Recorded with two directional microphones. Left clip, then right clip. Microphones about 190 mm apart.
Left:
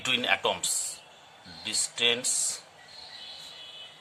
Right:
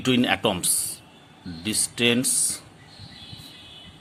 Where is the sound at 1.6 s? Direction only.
30° right (ahead or behind).